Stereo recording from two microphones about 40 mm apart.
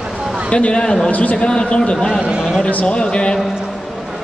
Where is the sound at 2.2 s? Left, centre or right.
Right.